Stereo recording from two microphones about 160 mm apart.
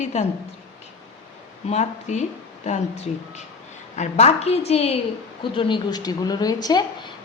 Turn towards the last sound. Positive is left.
turn(degrees=25)  # may be behind; listen again after turning